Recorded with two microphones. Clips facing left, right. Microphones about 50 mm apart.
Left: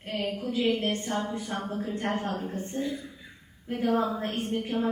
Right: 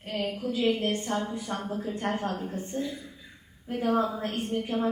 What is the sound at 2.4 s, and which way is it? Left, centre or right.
Speech, left.